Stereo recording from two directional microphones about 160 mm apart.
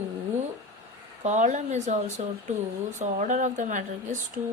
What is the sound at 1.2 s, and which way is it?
Speech, 50° right (ahead or behind).